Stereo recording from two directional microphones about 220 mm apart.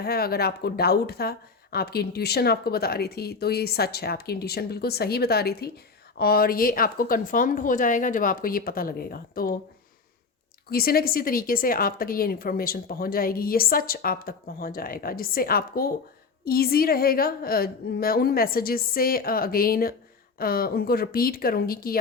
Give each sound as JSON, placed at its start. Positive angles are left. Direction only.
{"t": 0.0, "sound": "a woman's voice", "side_deg": 45}
{"t": 10.7, "sound": "a woman's voice", "side_deg": 45}